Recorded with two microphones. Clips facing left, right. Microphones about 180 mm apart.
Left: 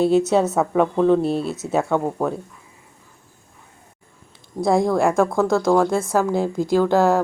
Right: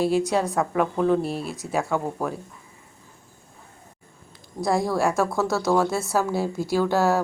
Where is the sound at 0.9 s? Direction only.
5° right (ahead or behind).